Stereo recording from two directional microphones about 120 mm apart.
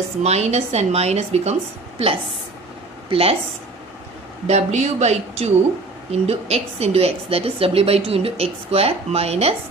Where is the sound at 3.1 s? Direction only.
55° right (ahead or behind).